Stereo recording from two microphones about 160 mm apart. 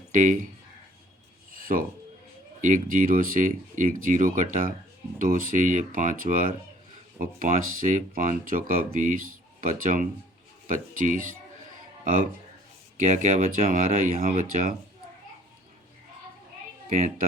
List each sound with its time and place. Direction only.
0.1 s speech: 55° right (ahead or behind)
1.6 s speech: 60° right (ahead or behind)
13.0 s speech: 50° right (ahead or behind)
16.9 s speech: 50° right (ahead or behind)